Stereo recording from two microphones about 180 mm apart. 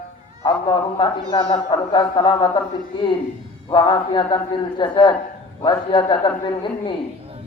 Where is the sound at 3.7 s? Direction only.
25° left (ahead or behind).